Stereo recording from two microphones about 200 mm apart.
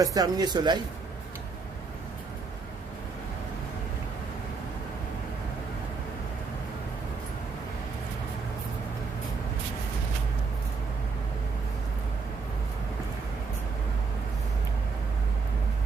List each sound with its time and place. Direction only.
0.0 s speech: 20° right (ahead or behind)